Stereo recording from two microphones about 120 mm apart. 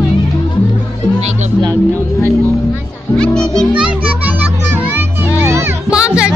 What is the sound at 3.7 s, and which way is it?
Music, 10° right (ahead or behind).